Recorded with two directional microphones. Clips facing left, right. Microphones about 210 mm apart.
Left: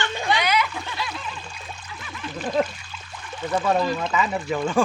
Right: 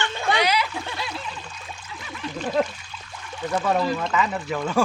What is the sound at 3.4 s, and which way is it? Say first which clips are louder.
Speech: left 1 dB; 5° left (ahead or behind).